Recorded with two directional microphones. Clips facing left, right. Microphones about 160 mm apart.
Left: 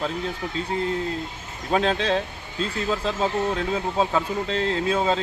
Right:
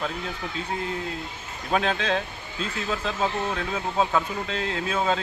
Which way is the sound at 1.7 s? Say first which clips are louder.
Left 3 dB; 30° left (ahead or behind).